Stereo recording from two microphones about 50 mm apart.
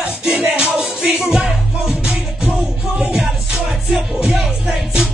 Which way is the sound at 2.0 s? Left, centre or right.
Centre.